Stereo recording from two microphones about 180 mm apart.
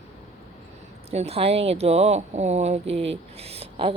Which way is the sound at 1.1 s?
35° right (ahead or behind).